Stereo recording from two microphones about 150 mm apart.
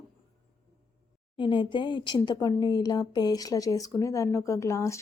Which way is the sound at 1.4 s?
35° left (ahead or behind).